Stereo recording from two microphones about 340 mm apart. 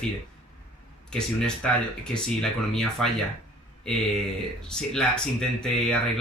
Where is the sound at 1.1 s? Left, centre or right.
Centre.